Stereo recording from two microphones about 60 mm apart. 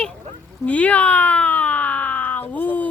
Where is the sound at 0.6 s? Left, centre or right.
Left.